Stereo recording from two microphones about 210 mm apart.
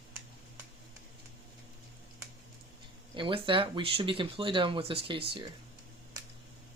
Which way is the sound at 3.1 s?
25° right (ahead or behind).